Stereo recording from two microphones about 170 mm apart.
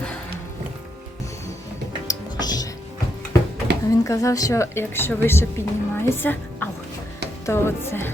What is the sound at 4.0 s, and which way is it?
A woman's voice, 20° left (ahead or behind).